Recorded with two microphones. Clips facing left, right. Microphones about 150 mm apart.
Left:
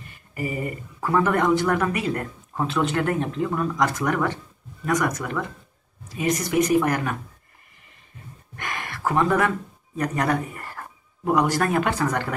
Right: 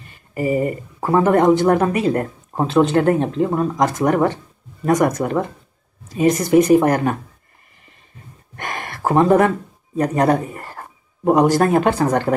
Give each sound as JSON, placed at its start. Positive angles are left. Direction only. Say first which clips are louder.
{"t": 0.3, "sound": "speech", "louder": "right 9 dB", "side_deg": -30}
{"t": 8.5, "sound": "speech", "louder": "right 4 dB", "side_deg": -40}